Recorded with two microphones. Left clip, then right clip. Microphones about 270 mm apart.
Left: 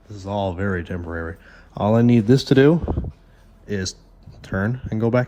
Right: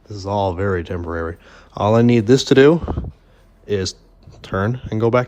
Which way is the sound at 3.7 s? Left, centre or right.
Right.